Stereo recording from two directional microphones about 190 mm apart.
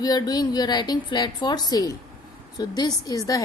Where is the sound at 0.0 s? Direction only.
20° left (ahead or behind).